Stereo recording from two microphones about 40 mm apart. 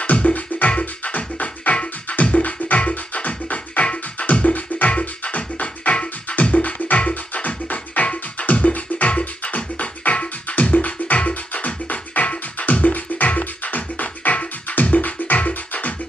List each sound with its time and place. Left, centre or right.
0.0 s music: left